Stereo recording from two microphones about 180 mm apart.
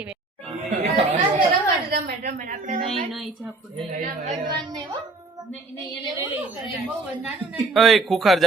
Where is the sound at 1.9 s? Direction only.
55° right (ahead or behind).